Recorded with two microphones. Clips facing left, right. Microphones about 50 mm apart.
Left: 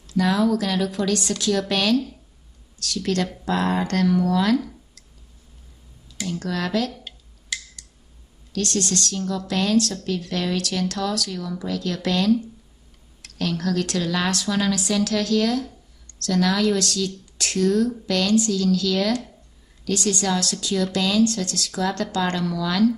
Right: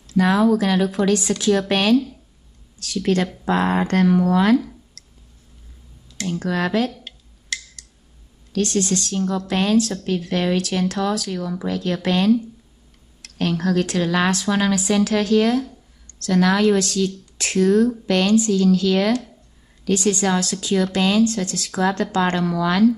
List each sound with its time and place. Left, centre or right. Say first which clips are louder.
0.1 s speech: right 4 dB; right
6.2 s speech: right 4 dB; right
6.9 s a sound: even; centre
8.5 s a woman's voice: right 4 dB; centre
9.1 s speech: right 3 dB; right